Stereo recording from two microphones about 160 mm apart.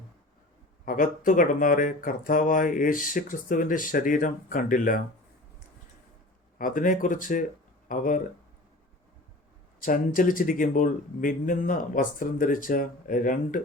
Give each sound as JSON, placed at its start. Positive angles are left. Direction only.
{"t": 0.9, "sound": "speech", "side_deg": 55}
{"t": 6.6, "sound": "speech", "side_deg": 60}
{"t": 9.8, "sound": "speech", "side_deg": 60}